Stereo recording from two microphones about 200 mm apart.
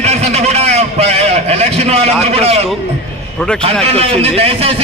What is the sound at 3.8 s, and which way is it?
Speech, 30° right (ahead or behind).